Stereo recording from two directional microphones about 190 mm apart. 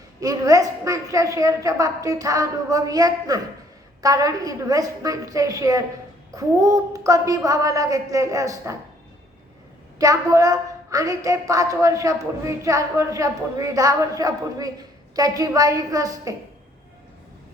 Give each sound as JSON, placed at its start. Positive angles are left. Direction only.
{"t": 0.2, "sound": "a woman's voice", "side_deg": -20}
{"t": 10.0, "sound": "a woman's voice", "side_deg": -15}